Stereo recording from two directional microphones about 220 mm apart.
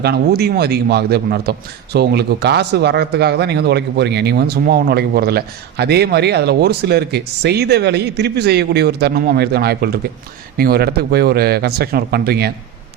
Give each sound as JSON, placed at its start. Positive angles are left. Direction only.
{"t": 0.0, "sound": "a man's voice", "side_deg": -45}